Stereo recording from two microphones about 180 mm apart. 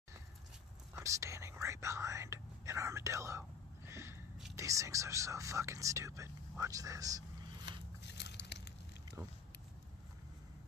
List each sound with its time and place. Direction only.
0.9 s speech: 15° right (ahead or behind)
8.0 s biting: 70° left (ahead or behind)